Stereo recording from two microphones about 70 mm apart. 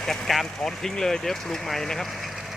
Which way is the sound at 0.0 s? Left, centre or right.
Centre.